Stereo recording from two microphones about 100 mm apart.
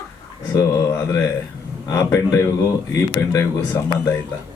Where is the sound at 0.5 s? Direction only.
30° left (ahead or behind).